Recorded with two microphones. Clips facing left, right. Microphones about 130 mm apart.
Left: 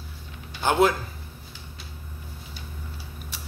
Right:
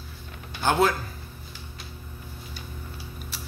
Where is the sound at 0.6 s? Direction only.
20° left (ahead or behind).